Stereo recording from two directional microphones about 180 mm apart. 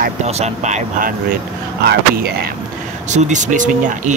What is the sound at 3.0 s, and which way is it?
Speech, 40° right (ahead or behind).